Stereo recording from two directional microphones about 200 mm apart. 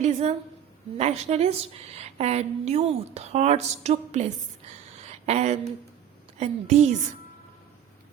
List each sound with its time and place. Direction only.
0.0 s a woman's voice: 35° right (ahead or behind)
4.9 s a sound: 35° right (ahead or behind)
6.3 s a woman's voice: 35° right (ahead or behind)